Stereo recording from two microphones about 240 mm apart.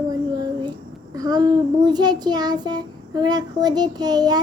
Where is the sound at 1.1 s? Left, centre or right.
Centre.